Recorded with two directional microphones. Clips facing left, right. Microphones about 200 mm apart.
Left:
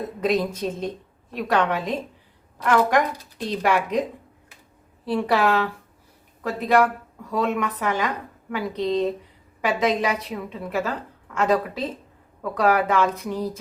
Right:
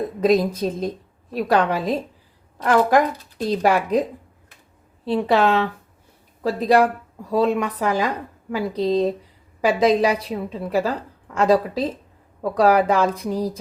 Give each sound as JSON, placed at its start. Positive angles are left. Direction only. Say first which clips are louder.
{"t": 0.2, "sound": "a woman's voice", "louder": "right 5 dB", "side_deg": -35}
{"t": 5.0, "sound": "a woman's voice", "louder": "right 3 dB", "side_deg": -25}